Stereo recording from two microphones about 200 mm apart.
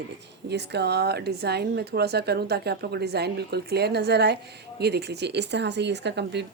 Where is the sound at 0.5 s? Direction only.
55° right (ahead or behind).